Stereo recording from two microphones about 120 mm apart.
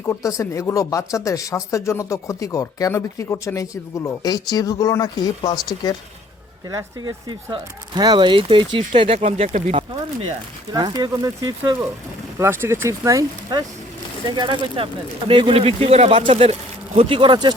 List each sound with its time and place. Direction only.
0.0 s speech: 25° left (ahead or behind)
6.7 s speech: 35° right (ahead or behind); by 9.8 s 75° right (ahead or behind)
10.7 s speech: 35° right (ahead or behind)